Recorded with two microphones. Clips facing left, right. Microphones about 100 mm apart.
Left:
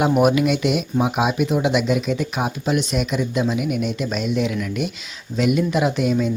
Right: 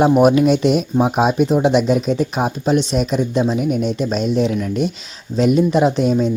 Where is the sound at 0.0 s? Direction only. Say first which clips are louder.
Right 5 dB; 35° right (ahead or behind).